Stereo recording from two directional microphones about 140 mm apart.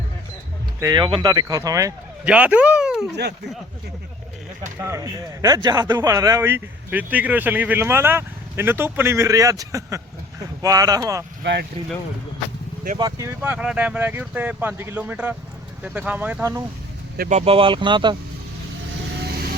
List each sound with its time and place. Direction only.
0.8 s speech: 30° right (ahead or behind)
2.2 s a man's voice: 10° right (ahead or behind)
4.8 s a man's voice: 20° right (ahead or behind)
13.0 s speech: 25° right (ahead or behind)
13.4 s a man's voice: 10° right (ahead or behind)
17.2 s speech: 60° right (ahead or behind)
17.4 s speech: 40° right (ahead or behind)